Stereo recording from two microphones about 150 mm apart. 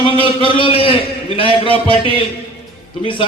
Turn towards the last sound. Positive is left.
turn(degrees=35)  # may be behind; listen again after turning